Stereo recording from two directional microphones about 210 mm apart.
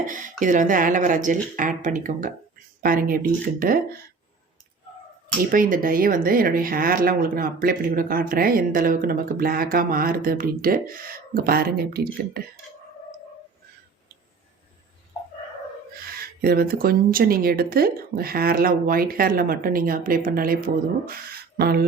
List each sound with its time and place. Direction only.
0.0 s speech: 40° right (ahead or behind)
5.5 s speech: 40° right (ahead or behind)
16.4 s speech: 45° right (ahead or behind)
21.6 s speech: 50° right (ahead or behind)